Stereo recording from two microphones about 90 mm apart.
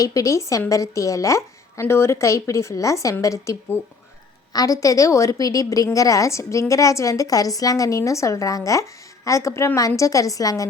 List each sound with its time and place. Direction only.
0.0 s a woman's voice: 40° left (ahead or behind)